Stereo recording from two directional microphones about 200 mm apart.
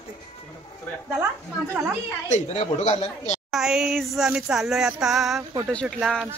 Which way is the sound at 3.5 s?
Centre (ahead or behind).